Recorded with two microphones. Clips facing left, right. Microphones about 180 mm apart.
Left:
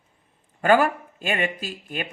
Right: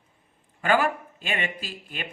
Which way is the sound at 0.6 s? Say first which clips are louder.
Left 4 dB; 45° left (ahead or behind).